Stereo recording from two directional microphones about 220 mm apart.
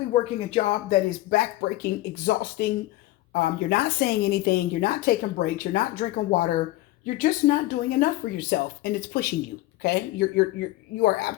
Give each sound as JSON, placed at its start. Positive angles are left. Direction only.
{"t": 0.1, "sound": "speech", "side_deg": 30}
{"t": 1.3, "sound": "a woman's voice", "side_deg": 45}